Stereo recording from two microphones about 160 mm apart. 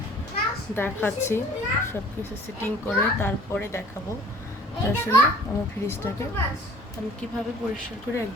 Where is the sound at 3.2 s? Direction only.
15° left (ahead or behind).